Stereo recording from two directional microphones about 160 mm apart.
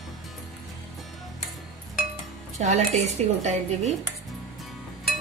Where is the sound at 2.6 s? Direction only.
45° right (ahead or behind).